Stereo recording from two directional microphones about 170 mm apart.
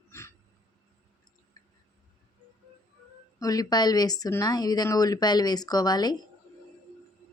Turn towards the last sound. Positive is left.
turn(degrees=25)  # may be behind; listen again after turning